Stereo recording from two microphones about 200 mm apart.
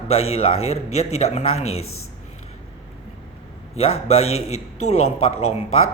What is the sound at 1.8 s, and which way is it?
Speech, 90° left.